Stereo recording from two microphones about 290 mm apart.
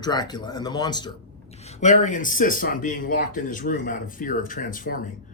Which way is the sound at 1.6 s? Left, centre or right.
Left.